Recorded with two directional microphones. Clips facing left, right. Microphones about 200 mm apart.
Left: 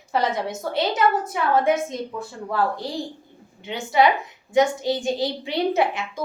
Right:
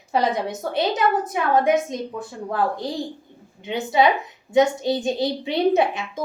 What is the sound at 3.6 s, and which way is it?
A woman's voice, 20° right (ahead or behind).